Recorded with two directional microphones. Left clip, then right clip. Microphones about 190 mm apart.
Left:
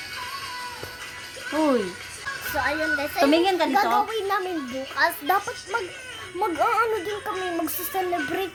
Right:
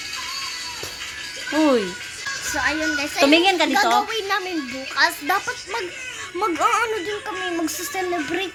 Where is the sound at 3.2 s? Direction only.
20° right (ahead or behind).